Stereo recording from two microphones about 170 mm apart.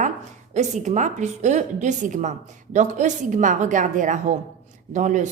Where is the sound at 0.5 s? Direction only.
45° right (ahead or behind).